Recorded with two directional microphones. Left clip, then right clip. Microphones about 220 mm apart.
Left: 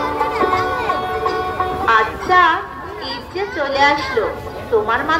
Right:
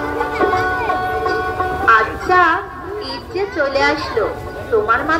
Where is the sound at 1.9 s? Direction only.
45° right (ahead or behind).